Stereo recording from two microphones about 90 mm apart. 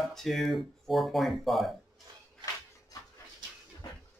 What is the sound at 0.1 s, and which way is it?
A man's voice, centre (ahead or behind).